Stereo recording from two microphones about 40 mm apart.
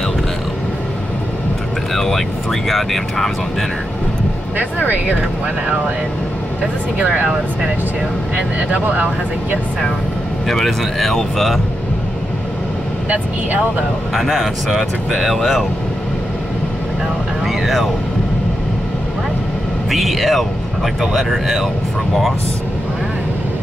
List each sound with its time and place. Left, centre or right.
2.0 s speech: centre
8.8 s speech: right
10.5 s speech: centre
14.1 s speech: centre
17.5 s speech: centre
19.9 s speech: centre